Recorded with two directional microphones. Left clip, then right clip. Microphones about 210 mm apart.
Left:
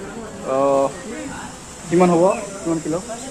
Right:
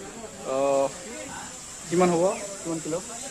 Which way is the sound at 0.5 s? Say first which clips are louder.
Left 6 dB; 20° right (ahead or behind).